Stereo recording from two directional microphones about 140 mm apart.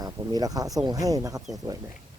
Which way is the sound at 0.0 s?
25° right (ahead or behind).